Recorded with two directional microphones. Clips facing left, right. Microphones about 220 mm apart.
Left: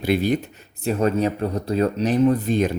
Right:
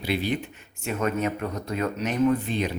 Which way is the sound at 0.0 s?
45° left (ahead or behind).